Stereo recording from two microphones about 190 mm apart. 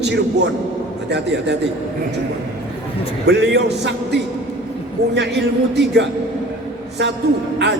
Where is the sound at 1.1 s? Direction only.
65° right (ahead or behind).